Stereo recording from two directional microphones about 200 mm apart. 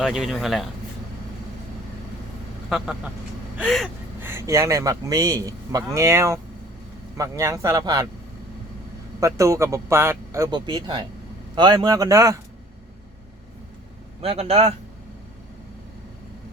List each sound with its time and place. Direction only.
0.0 s speech: centre (ahead or behind)
2.6 s speech: 5° right (ahead or behind)
4.2 s a man's voice: 15° right (ahead or behind)
9.2 s a man's voice: 15° right (ahead or behind)
14.2 s speech: 30° right (ahead or behind)